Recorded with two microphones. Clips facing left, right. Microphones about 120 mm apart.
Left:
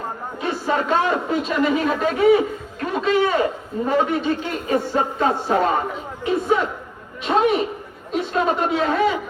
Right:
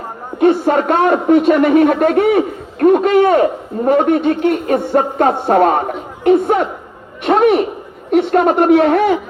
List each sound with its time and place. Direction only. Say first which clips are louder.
0.3 s speech: right 11 dB; 60° right (ahead or behind)